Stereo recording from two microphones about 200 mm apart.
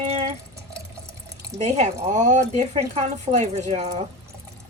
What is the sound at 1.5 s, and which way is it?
A woman's voice, 35° right (ahead or behind).